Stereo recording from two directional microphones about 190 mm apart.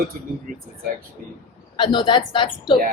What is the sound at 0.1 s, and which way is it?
Speech, 50° right (ahead or behind).